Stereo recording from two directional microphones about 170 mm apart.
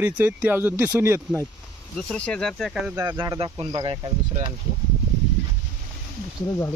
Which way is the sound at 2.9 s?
20° right (ahead or behind).